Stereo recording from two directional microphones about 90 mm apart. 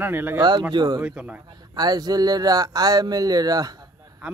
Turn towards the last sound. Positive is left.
turn(degrees=-45)  # may be behind; listen again after turning